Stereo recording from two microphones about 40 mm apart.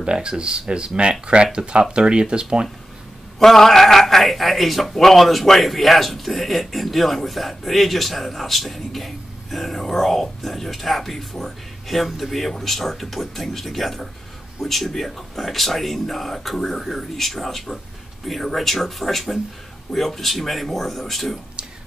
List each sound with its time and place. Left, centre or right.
0.0 s speech: right
3.3 s a man's voice: centre